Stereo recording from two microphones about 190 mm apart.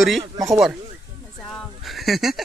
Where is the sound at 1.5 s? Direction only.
Centre (ahead or behind).